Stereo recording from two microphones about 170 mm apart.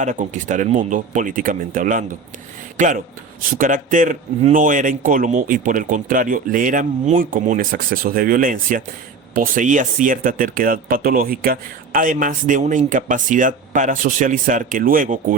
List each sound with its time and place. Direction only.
0.0 s speech: 45° right (ahead or behind)